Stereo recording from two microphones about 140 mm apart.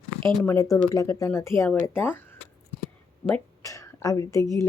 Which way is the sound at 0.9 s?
25° left (ahead or behind).